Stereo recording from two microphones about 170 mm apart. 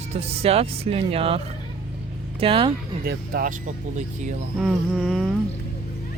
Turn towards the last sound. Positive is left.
turn(degrees=0)  # may be behind; listen again after turning